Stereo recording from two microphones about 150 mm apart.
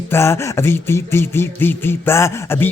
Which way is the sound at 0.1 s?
15° left (ahead or behind).